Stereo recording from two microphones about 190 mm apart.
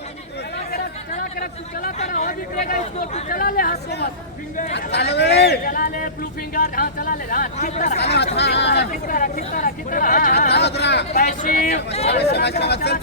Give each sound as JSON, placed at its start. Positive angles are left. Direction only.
{"t": 0.7, "sound": "speech", "side_deg": 45}
{"t": 7.9, "sound": "speech", "side_deg": 60}
{"t": 9.1, "sound": "speech", "side_deg": 45}
{"t": 10.5, "sound": "speech", "side_deg": 60}
{"t": 11.1, "sound": "speech", "side_deg": 45}
{"t": 11.9, "sound": "speech", "side_deg": 35}
{"t": 12.1, "sound": "speech", "side_deg": 60}